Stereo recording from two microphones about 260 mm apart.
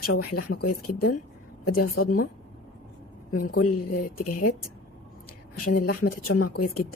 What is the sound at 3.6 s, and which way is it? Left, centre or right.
Speech, left.